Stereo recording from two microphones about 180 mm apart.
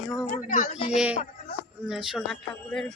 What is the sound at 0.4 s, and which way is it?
Speech, 45° left (ahead or behind).